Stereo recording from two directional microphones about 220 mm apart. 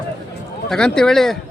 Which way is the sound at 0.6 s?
5° left (ahead or behind).